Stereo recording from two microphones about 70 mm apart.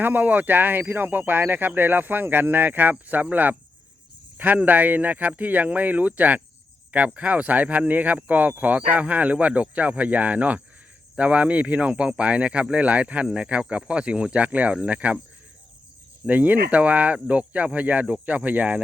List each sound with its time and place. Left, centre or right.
0.0 s speech: right
16.2 s speech: right